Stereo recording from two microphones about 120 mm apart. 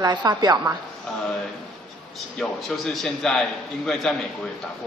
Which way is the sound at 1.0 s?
5° left (ahead or behind).